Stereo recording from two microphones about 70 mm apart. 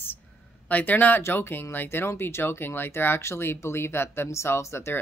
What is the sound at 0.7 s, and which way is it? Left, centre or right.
A woman's voice, left.